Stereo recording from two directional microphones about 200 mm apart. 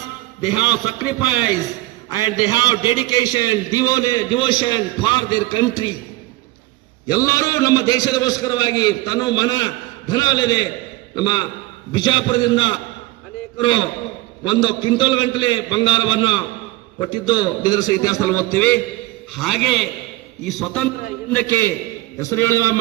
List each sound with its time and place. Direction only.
0.5 s a man's voice: 20° left (ahead or behind)
2.0 s a man's voice: 20° left (ahead or behind)
7.1 s a man's voice: 15° left (ahead or behind)